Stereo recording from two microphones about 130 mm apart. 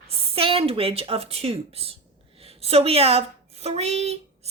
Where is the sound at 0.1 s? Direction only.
45° right (ahead or behind).